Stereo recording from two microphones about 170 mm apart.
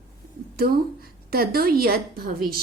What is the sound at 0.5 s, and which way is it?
A woman's voice, 60° right (ahead or behind).